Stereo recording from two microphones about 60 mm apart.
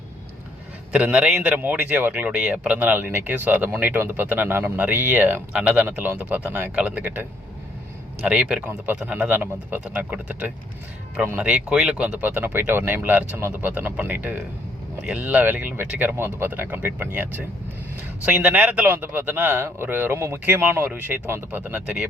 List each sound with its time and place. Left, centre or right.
0.9 s speech: centre; by 6.7 s right
6.7 s speech: right
8.2 s speech: centre
11.7 s speech: centre
11.9 s speech: right
18.9 s speech: right
20.4 s speech: right
21.6 s speech: right